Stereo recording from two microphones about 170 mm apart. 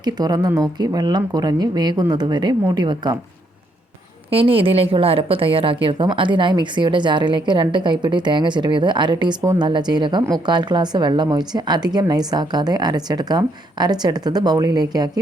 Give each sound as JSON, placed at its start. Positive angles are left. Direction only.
{"t": 0.0, "sound": "a woman's voice", "side_deg": -25}
{"t": 4.3, "sound": "a woman's voice", "side_deg": -35}